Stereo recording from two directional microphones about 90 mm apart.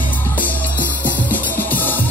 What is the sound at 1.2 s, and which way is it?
Music, 20° left (ahead or behind).